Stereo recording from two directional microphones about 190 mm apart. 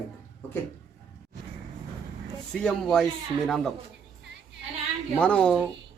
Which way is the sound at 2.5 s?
5° left (ahead or behind).